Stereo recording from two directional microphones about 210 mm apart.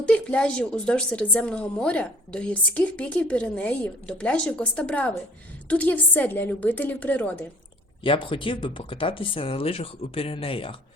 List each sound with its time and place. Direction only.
0.0 s a woman's voice: 5° left (ahead or behind)
8.0 s speech: 25° left (ahead or behind)